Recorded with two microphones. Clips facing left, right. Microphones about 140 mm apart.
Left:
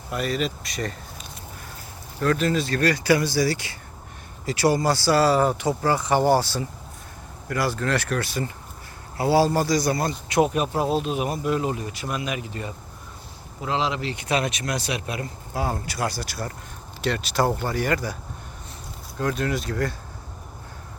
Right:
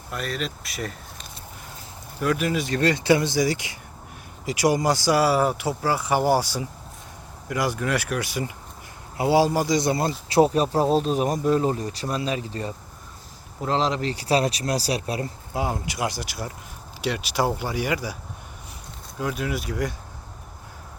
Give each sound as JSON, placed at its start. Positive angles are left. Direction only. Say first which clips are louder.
{"t": 0.1, "sound": "speech", "louder": "left 4 dB", "side_deg": 0}
{"t": 15.5, "sound": "speech", "louder": "even", "side_deg": -15}
{"t": 19.2, "sound": "speech", "louder": "left 2 dB", "side_deg": -10}